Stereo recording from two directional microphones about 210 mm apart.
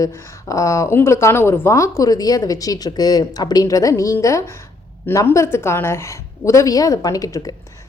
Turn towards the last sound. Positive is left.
turn(degrees=15)  # may be behind; listen again after turning